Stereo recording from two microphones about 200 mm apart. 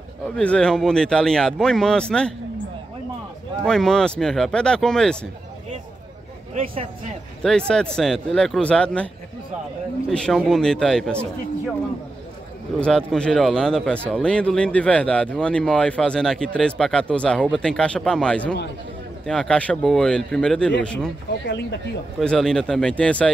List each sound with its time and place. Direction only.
0.4 s speech: 5° left (ahead or behind)
3.6 s speech: 5° left (ahead or behind)
7.4 s speech: 5° left (ahead or behind)
12.8 s speech: 5° left (ahead or behind)
21.5 s speech: 60° left (ahead or behind)
22.2 s speech: 5° left (ahead or behind)